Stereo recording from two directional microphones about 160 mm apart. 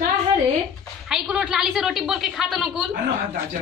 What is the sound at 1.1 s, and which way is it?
A child's voice, 5° right (ahead or behind).